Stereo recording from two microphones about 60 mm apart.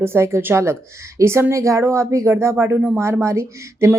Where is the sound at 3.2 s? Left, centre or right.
Right.